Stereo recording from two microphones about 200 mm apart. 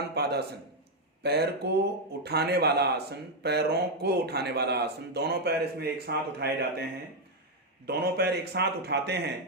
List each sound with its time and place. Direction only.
0.1 s speech: 55° right (ahead or behind)
7.9 s speech: 55° right (ahead or behind)